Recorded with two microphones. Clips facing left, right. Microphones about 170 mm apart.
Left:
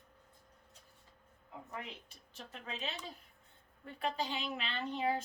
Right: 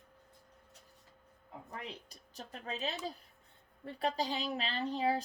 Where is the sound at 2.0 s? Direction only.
40° right (ahead or behind).